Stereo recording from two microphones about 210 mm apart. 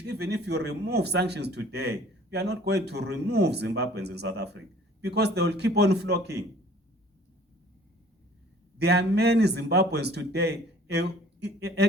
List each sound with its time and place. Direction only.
0.0 s speech: 50° right (ahead or behind)
8.8 s speech: 50° right (ahead or behind)